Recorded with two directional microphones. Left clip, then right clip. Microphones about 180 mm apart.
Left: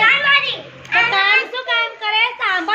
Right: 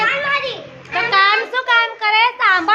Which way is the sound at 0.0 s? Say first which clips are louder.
Left 4 dB; 55° right (ahead or behind).